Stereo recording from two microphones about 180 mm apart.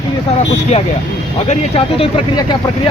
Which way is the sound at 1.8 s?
30° left (ahead or behind).